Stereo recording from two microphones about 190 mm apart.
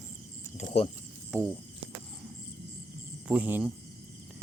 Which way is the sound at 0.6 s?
40° left (ahead or behind).